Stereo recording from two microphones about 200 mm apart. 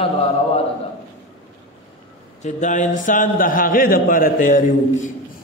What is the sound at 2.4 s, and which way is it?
A man's voice, 35° left (ahead or behind).